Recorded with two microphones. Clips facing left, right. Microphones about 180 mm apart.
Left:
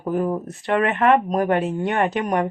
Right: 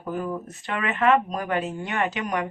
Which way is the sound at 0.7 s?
50° left (ahead or behind).